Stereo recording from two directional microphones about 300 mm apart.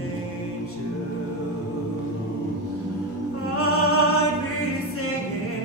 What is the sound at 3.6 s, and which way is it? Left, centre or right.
Opera, left.